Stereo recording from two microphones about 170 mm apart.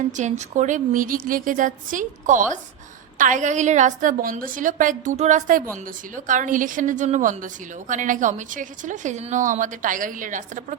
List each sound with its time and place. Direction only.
0.2 s a woman's voice: 45° right (ahead or behind)